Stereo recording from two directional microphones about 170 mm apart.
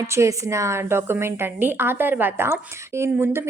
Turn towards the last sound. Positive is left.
turn(degrees=-15)  # may be behind; listen again after turning